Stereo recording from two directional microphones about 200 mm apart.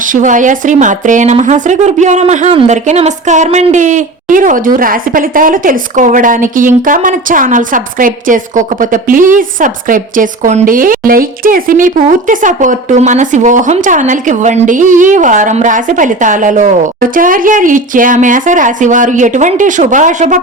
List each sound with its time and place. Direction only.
0.0 s speech: 40° right (ahead or behind)